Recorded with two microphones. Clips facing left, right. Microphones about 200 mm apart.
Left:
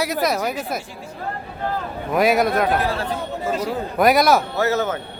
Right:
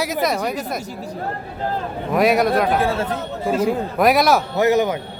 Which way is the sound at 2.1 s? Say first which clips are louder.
Right 1 dB; centre (ahead or behind).